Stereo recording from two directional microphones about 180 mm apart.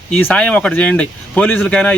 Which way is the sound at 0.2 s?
10° left (ahead or behind).